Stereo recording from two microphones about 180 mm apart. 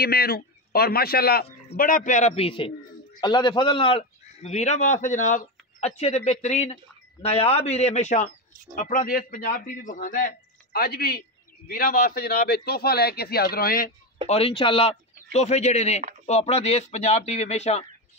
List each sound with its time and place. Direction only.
0.0 s a man's voice: 60° left (ahead or behind)
14.2 s a man's voice: 35° left (ahead or behind)